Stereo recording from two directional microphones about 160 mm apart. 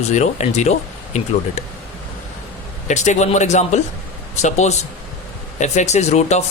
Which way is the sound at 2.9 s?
45° left (ahead or behind).